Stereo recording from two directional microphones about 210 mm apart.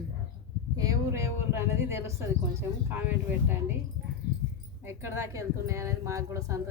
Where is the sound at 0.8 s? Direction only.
15° right (ahead or behind).